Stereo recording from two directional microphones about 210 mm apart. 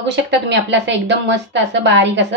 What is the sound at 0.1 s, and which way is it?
A woman's voice, 55° right (ahead or behind).